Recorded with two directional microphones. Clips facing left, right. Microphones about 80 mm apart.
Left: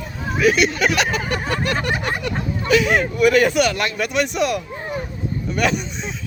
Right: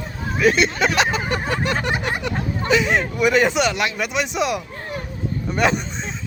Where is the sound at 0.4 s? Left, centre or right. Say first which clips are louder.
Left 1 dB; right.